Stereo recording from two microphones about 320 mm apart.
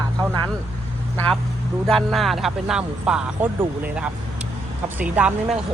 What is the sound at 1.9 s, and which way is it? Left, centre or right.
Speech, centre.